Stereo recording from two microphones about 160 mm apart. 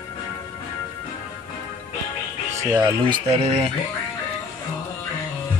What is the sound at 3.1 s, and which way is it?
Speech, 35° right (ahead or behind).